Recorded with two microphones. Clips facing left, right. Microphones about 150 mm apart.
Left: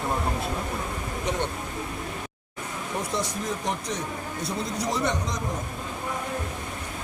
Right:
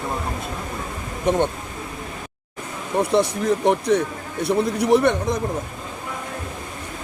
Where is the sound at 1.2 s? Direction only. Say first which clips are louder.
Right 10 dB; 55° right (ahead or behind).